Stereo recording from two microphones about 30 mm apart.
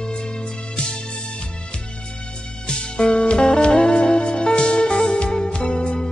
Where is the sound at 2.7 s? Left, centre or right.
Left.